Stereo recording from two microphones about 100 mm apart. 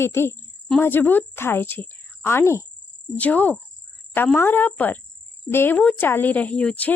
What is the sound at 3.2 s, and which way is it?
Speech, 15° left (ahead or behind).